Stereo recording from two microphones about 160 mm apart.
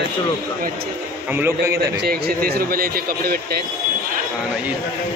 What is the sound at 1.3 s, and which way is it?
Speech, 15° right (ahead or behind).